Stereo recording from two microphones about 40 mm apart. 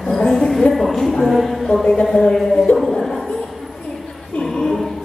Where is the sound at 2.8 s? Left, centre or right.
Centre.